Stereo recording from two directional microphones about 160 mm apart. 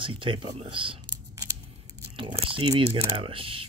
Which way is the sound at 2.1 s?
35° right (ahead or behind).